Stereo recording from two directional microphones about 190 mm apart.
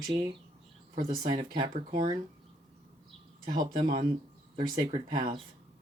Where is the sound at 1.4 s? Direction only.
25° right (ahead or behind).